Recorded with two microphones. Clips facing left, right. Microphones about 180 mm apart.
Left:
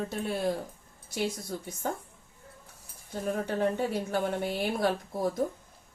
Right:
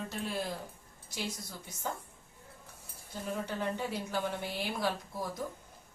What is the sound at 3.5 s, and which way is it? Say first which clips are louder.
Speech: left 7 dB; 55° left (ahead or behind).